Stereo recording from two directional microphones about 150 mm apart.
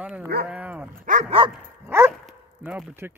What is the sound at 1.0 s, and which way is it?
Speech, 55° right (ahead or behind).